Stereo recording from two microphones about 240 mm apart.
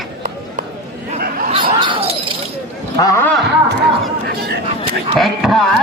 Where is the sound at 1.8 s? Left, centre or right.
Right.